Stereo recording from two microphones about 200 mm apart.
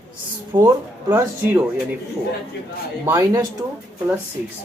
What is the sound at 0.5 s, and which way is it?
Speech, 20° right (ahead or behind).